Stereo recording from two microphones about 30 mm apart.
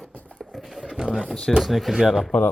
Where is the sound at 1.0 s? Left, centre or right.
Right.